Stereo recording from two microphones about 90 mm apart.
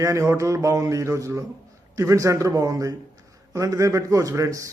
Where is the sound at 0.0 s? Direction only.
35° right (ahead or behind).